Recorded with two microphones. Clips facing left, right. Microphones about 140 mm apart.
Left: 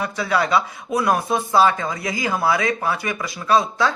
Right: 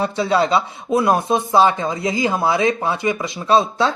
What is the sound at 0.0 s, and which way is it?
Speech, 25° right (ahead or behind).